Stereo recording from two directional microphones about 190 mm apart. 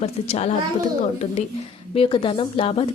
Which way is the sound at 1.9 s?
30° left (ahead or behind).